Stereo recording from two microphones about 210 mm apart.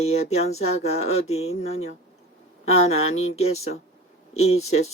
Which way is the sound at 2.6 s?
30° left (ahead or behind).